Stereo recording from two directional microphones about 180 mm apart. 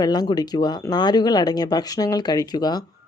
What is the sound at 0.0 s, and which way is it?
Speech, 20° left (ahead or behind).